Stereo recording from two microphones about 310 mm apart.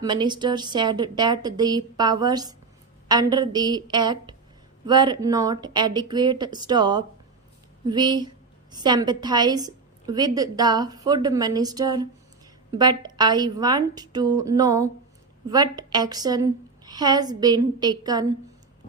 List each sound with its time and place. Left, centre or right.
0.0 s a woman's voice: centre